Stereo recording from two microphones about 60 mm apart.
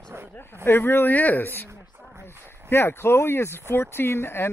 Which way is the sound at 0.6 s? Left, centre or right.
Left.